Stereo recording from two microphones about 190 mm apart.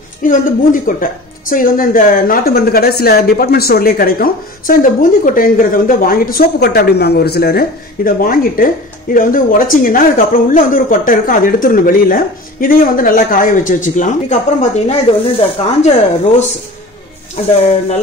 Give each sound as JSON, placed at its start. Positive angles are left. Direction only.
{"t": 0.2, "sound": "speech", "side_deg": 45}
{"t": 14.6, "sound": "speech", "side_deg": 30}